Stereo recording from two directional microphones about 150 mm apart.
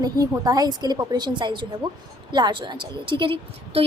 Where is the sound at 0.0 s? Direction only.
25° right (ahead or behind).